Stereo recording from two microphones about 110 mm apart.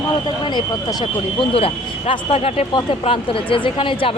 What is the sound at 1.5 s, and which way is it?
Speech, 60° left (ahead or behind).